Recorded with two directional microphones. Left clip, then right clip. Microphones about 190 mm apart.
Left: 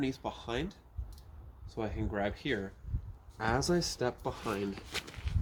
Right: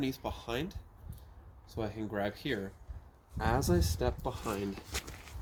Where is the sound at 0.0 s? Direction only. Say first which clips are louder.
Left 1 dB; 15° right (ahead or behind).